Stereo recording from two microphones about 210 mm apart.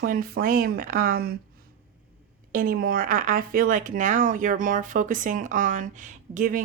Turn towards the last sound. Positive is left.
turn(degrees=-40)  # may be behind; listen again after turning